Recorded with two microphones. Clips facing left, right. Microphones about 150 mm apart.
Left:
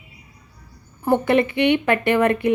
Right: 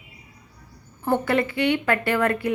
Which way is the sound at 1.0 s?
15° left (ahead or behind).